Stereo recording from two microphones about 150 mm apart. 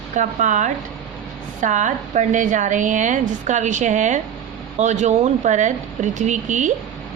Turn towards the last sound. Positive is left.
turn(degrees=-55)  # may be behind; listen again after turning